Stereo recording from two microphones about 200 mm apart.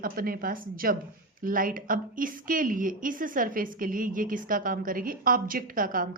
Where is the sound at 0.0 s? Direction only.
45° right (ahead or behind).